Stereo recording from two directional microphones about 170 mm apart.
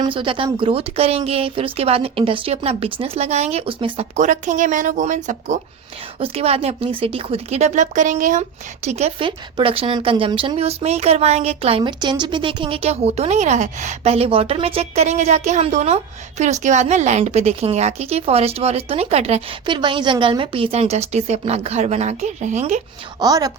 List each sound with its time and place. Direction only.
0.0 s a woman's voice: 30° right (ahead or behind); by 5.5 s 45° right (ahead or behind)
6.1 s a woman's voice: 35° right (ahead or behind)
23.2 s a woman's voice: 20° right (ahead or behind)